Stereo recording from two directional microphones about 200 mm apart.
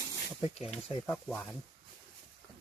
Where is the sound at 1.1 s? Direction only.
10° left (ahead or behind).